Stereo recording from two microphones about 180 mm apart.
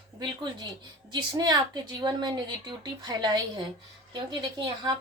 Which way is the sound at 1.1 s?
25° right (ahead or behind).